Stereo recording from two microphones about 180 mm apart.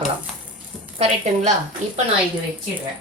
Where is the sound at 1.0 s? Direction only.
40° right (ahead or behind).